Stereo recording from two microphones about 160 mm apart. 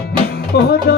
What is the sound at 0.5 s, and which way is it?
Music, 90° left.